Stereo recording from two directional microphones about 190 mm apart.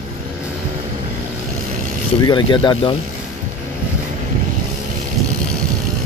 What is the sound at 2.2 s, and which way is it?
Speech, 20° left (ahead or behind).